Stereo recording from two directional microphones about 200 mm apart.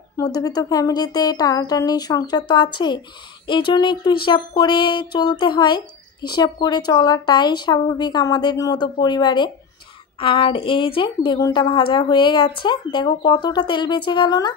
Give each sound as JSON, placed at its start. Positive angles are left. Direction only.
{"t": 0.2, "sound": "speech", "side_deg": 20}